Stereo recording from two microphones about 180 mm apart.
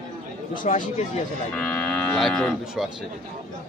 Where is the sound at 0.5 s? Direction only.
45° left (ahead or behind).